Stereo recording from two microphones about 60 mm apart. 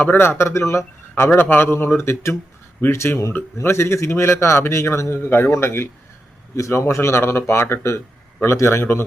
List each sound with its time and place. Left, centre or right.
0.0 s speech: left
1.3 s a man's voice: left
2.0 s speech: left